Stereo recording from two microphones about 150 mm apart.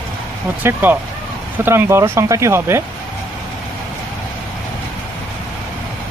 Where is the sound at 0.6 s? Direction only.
10° right (ahead or behind).